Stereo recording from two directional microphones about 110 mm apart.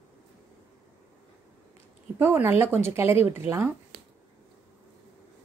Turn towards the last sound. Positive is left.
turn(degrees=-20)  # may be behind; listen again after turning